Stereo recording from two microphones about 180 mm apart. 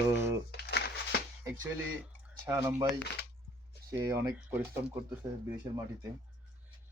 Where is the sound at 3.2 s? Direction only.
65° left (ahead or behind).